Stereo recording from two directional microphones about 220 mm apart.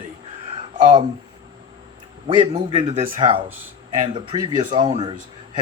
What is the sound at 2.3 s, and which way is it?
Speech, 25° right (ahead or behind).